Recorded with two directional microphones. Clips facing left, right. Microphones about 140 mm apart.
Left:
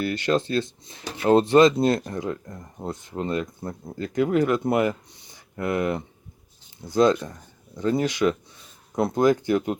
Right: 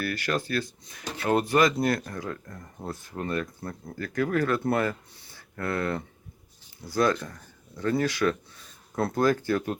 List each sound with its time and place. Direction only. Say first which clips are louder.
0.0 s speech: left 6 dB; 20° left (ahead or behind)